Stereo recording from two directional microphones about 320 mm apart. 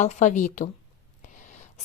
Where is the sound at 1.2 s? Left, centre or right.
Left.